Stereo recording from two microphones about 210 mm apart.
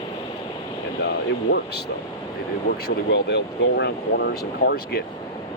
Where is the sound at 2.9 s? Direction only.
55° left (ahead or behind).